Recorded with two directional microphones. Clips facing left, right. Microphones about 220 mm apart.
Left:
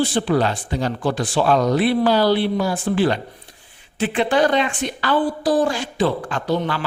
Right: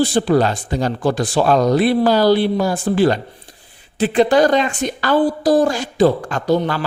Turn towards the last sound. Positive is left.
turn(degrees=-40)  # may be behind; listen again after turning